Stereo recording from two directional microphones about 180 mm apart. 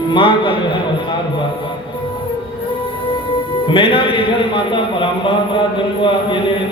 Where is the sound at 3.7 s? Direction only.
30° left (ahead or behind).